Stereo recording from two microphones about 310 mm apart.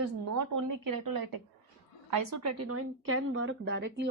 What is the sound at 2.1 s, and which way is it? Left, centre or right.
A woman's voice, right.